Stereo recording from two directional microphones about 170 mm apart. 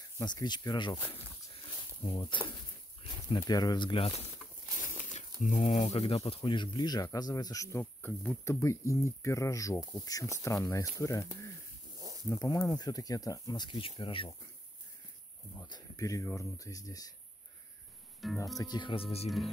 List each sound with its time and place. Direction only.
0.2 s speech: 25° left (ahead or behind)
1.5 s a sound: 30° left (ahead or behind)
3.0 s speech: 30° left (ahead or behind)
4.4 s a sound: centre (ahead or behind)
4.8 s speech: 45° left (ahead or behind); by 7.8 s 20° left (ahead or behind)
7.8 s speech: 10° left (ahead or behind); by 14.3 s 30° left (ahead or behind)
15.6 s speech: 20° left (ahead or behind)
18.2 s speech: centre (ahead or behind)
18.6 s speech: 25° left (ahead or behind)
19.2 s speech: centre (ahead or behind)